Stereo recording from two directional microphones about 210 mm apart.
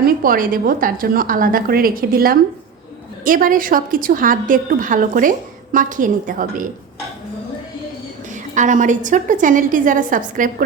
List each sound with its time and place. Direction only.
0.0 s a woman's voice: 40° right (ahead or behind)
8.5 s a woman's voice: 35° right (ahead or behind)